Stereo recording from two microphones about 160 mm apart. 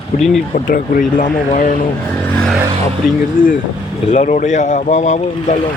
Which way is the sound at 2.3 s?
5° left (ahead or behind).